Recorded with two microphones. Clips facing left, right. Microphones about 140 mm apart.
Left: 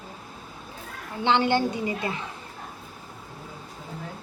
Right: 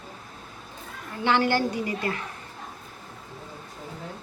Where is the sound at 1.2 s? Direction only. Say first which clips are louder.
Left 1 dB; 20° left (ahead or behind).